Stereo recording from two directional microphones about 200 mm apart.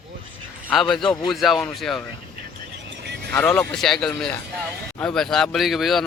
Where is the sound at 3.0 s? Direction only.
55° right (ahead or behind).